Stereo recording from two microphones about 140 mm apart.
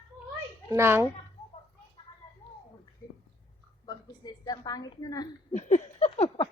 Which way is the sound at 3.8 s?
30° left (ahead or behind).